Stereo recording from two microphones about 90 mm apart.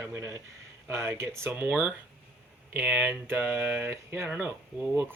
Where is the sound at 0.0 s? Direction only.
35° right (ahead or behind).